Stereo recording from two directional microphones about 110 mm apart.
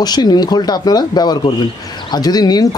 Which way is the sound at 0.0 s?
40° left (ahead or behind).